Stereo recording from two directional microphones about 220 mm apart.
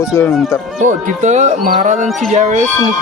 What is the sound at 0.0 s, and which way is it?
Speech, 15° left (ahead or behind).